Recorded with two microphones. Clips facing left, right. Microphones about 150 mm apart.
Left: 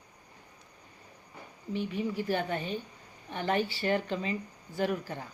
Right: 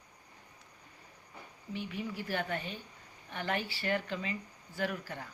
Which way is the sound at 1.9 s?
25° left (ahead or behind).